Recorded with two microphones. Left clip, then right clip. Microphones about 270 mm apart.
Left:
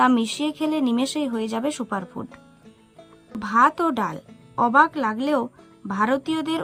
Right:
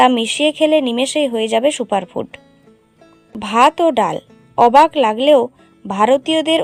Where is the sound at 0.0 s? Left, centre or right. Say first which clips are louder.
Right 8 dB; centre.